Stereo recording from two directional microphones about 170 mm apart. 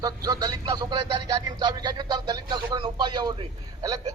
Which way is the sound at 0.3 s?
20° right (ahead or behind).